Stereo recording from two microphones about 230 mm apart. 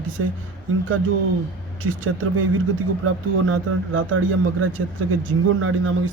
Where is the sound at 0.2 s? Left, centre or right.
Right.